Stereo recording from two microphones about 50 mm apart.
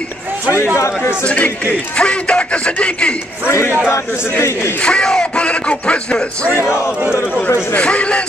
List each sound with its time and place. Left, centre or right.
0.7 s a man's voice: left
1.2 s speech: left
3.4 s speech: left
4.8 s speech: centre
7.7 s speech: left